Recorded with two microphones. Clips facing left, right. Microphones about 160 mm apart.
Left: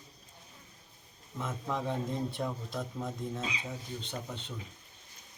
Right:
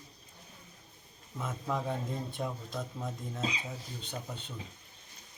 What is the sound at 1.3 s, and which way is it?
Speech, 5° right (ahead or behind).